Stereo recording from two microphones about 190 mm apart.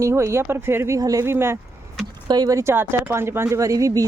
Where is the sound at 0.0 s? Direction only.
15° right (ahead or behind).